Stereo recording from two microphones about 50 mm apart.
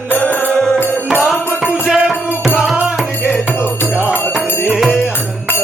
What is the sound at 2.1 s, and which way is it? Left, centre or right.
Music, centre.